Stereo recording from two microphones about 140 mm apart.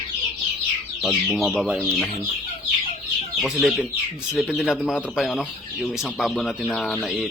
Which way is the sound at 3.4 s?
Centre (ahead or behind).